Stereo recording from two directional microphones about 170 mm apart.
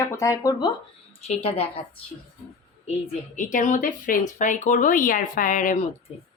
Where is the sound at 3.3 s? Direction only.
50° left (ahead or behind).